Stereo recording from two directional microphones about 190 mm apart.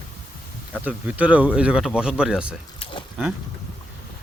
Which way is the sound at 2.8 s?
30° left (ahead or behind).